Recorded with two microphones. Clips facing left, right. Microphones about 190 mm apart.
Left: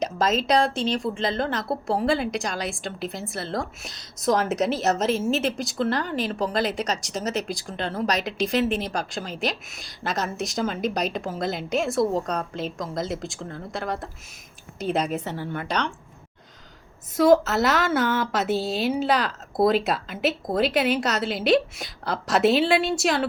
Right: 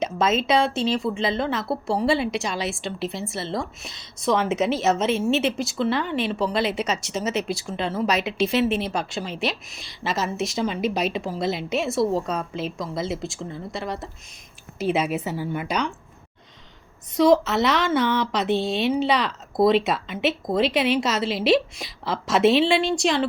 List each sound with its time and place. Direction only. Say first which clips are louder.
0.0 s a woman's voice: right 1 dB; centre (ahead or behind)
7.3 s speech: right 2 dB; 40° left (ahead or behind)
7.5 s a woman's voice: right 3 dB; centre (ahead or behind)
9.3 s speech: even; 40° left (ahead or behind)
9.7 s a woman's voice: right 1 dB; centre (ahead or behind)
17.2 s a woman's voice: even; 5° left (ahead or behind)